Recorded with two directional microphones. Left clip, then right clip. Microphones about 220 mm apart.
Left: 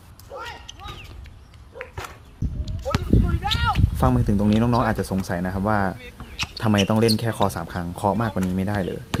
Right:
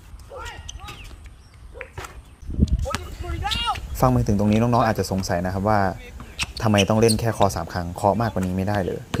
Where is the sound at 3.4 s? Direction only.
35° right (ahead or behind).